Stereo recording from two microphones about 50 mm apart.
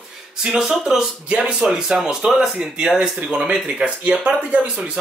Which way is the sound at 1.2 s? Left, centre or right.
Right.